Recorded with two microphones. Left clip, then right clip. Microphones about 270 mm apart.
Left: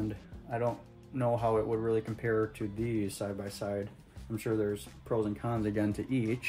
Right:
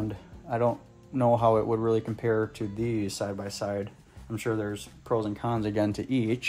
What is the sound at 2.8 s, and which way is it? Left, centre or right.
Speech, centre.